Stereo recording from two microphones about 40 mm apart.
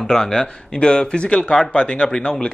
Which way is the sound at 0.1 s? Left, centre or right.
Centre.